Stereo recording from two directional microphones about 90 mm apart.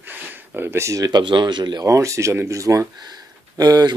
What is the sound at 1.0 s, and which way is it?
Speech, 50° right (ahead or behind).